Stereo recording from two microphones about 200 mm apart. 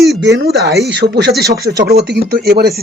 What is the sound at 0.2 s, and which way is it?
Speech, 65° right (ahead or behind).